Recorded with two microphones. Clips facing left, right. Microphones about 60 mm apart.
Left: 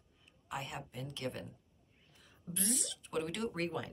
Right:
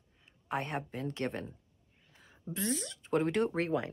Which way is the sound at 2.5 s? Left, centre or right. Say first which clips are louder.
Right 4 dB; right.